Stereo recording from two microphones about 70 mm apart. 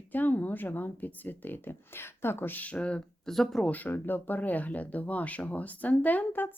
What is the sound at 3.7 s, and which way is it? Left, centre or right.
Speech, left.